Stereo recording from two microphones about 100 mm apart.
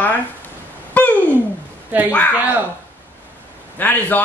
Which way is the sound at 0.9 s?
15° left (ahead or behind).